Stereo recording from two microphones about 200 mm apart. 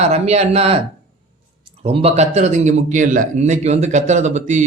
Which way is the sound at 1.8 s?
30° right (ahead or behind).